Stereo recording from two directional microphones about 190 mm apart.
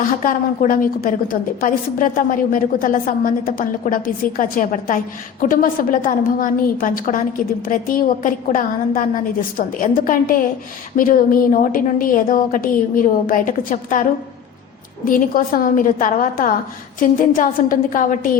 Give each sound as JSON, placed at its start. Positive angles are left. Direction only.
{"t": 0.3, "sound": "a woman's voice", "side_deg": 45}
{"t": 15.0, "sound": "a woman's voice", "side_deg": 45}